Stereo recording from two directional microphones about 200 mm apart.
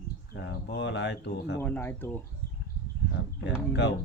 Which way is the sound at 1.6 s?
10° left (ahead or behind).